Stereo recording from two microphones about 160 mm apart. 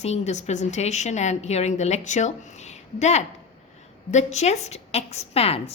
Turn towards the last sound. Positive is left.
turn(degrees=40)  # may be behind; listen again after turning